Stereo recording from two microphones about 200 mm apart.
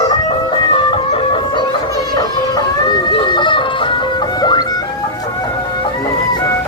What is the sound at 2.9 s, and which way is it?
Music, 25° left (ahead or behind).